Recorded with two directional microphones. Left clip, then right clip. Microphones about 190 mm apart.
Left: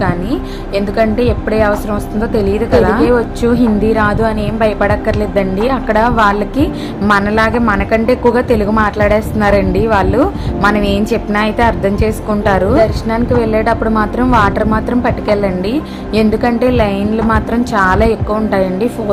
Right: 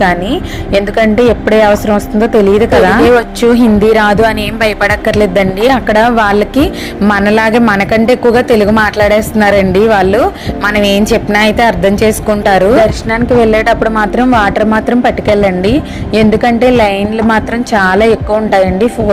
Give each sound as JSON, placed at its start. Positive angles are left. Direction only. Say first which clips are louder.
{"t": 0.0, "sound": "a woman's voice", "louder": "right 6 dB", "side_deg": -25}